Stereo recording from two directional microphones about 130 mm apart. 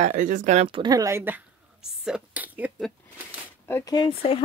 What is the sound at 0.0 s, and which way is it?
Speech, 75° right (ahead or behind).